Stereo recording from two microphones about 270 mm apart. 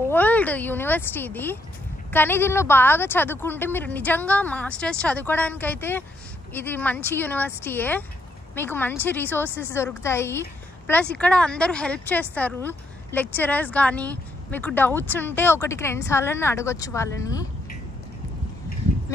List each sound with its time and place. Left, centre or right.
0.1 s a woman's voice: centre